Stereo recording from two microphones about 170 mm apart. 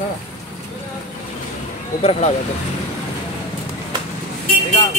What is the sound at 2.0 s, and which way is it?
Speech, 35° left (ahead or behind).